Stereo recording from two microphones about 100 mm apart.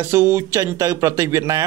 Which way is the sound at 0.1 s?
25° right (ahead or behind).